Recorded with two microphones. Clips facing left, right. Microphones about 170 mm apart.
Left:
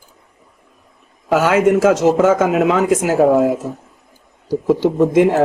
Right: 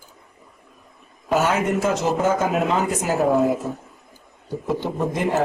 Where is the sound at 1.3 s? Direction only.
90° left.